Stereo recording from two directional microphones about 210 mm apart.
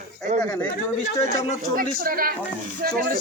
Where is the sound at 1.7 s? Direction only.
40° right (ahead or behind).